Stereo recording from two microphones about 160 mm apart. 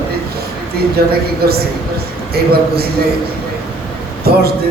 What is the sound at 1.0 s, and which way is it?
Speech, 75° right (ahead or behind).